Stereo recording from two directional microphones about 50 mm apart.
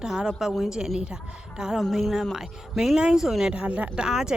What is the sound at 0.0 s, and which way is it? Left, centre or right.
Speech, centre.